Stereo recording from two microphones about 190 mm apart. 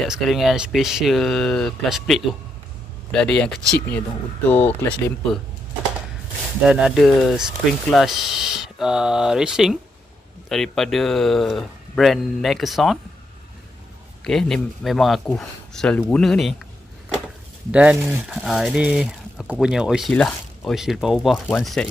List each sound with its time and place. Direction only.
0.0 s speech: centre (ahead or behind)
6.6 s speech: 5° right (ahead or behind)
14.2 s speech: centre (ahead or behind)
17.6 s speech: 5° right (ahead or behind)